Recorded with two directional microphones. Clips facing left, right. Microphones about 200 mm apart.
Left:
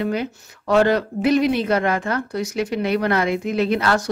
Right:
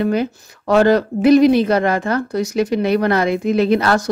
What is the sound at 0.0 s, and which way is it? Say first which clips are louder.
Speech: right 5 dB; 40° right (ahead or behind).